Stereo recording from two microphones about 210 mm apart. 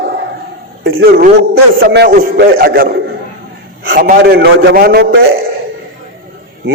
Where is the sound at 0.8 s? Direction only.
60° right (ahead or behind).